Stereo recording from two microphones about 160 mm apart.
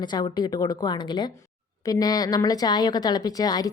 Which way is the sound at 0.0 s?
25° left (ahead or behind).